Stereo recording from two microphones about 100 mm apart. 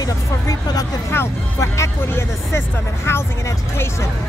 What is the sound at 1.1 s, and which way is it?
Speech, 25° left (ahead or behind).